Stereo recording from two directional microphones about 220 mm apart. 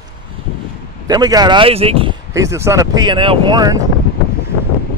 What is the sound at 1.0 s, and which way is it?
Speech, 15° right (ahead or behind).